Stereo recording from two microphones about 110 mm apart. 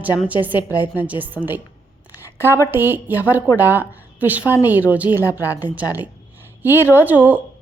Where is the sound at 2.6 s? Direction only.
20° right (ahead or behind).